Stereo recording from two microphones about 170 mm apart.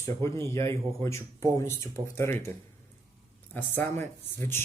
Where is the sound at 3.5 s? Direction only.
10° left (ahead or behind).